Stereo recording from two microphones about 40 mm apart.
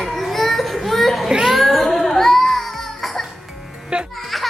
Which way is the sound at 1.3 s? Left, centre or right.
Centre.